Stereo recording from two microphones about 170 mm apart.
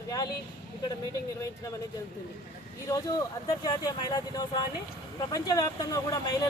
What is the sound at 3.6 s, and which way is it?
Speech, 25° left (ahead or behind).